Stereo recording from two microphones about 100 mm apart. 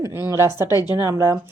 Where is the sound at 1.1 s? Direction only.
30° right (ahead or behind).